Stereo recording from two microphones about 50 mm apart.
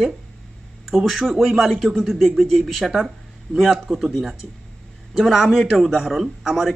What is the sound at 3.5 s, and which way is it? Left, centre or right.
Speech, left.